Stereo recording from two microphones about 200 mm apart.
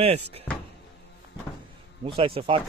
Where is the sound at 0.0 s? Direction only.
30° right (ahead or behind).